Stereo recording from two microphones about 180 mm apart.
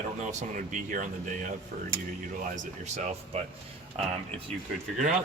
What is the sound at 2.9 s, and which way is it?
Speech, 40° right (ahead or behind).